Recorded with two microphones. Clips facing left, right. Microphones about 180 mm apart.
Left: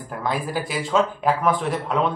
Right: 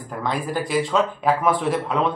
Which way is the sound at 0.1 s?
5° left (ahead or behind).